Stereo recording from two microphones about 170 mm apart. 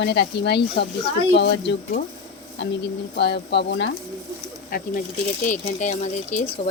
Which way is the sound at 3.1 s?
90° left.